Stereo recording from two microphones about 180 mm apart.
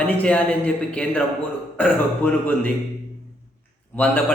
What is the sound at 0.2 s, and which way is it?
A man's voice, 10° left (ahead or behind).